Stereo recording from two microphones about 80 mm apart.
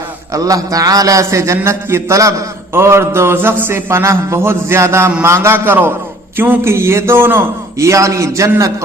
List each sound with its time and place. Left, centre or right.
0.3 s a man's voice: right
7.8 s a man's voice: right